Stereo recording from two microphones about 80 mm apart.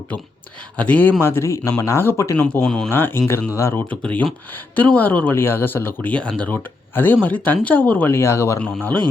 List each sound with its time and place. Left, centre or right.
0.8 s speech: centre
1.2 s speech: left
2.6 s speech: centre
2.9 s speech: left
3.8 s speech: centre; by 8.5 s left